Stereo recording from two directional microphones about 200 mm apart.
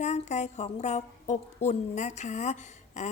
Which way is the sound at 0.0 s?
35° left (ahead or behind).